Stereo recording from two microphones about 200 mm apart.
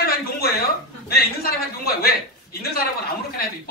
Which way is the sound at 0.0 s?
50° left (ahead or behind).